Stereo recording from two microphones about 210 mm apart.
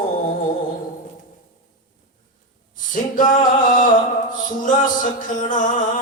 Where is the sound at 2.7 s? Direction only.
40° left (ahead or behind).